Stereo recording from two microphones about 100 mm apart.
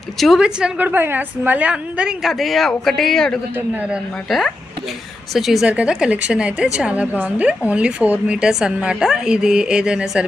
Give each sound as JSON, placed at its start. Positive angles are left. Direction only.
{"t": 0.2, "sound": "a woman's voice", "side_deg": -5}
{"t": 0.9, "sound": "a woman's voice", "side_deg": -20}
{"t": 2.2, "sound": "speech", "side_deg": 0}
{"t": 3.5, "sound": "a woman's voice", "side_deg": -15}
{"t": 4.3, "sound": "a woman's voice", "side_deg": 0}